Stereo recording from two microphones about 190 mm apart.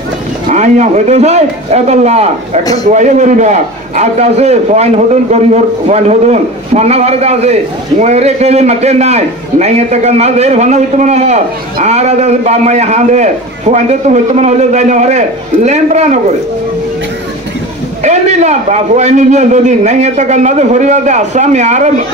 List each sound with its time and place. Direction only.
0.5 s a man's voice: 40° right (ahead or behind)
18.0 s a man's voice: 35° right (ahead or behind)